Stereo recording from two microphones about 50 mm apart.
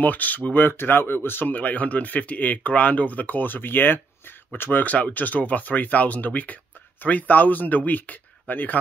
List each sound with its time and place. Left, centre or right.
0.0 s speech: left
0.7 s speech: left
4.8 s speech: left